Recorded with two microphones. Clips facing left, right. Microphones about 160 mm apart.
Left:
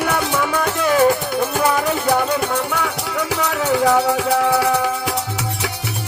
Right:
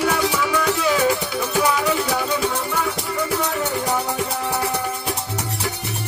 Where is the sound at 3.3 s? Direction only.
90° left.